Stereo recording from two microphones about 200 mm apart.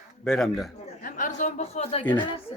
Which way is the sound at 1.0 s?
40° left (ahead or behind).